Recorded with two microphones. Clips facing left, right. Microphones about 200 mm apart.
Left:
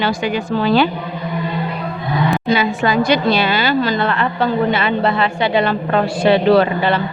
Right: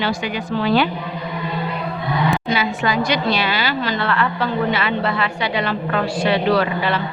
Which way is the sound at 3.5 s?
50° left (ahead or behind).